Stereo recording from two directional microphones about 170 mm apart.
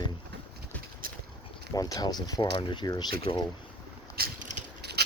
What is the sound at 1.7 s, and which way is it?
Speech, 20° left (ahead or behind).